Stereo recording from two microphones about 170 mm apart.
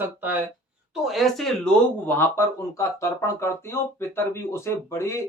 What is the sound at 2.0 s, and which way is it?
Speech, 15° left (ahead or behind).